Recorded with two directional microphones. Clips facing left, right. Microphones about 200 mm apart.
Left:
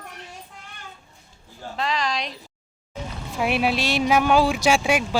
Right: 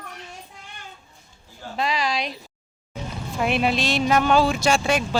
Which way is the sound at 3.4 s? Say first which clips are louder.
Even; 5° left (ahead or behind).